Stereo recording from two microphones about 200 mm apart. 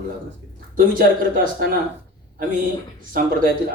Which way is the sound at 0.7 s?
45° right (ahead or behind).